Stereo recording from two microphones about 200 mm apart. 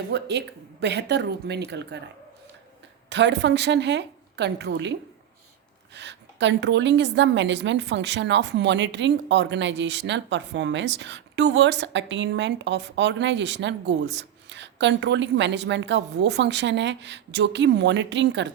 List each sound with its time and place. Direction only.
0.1 s a woman's voice: 55° right (ahead or behind)
3.1 s a woman's voice: 60° right (ahead or behind)